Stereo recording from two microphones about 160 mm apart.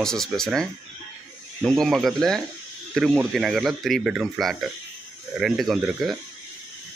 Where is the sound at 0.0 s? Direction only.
5° left (ahead or behind).